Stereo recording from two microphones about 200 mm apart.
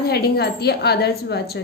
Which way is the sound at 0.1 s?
55° left (ahead or behind).